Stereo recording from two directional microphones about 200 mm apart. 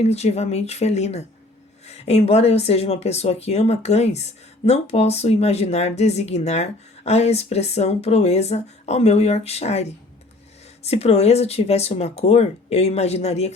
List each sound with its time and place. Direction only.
0.0 s speech: 30° left (ahead or behind)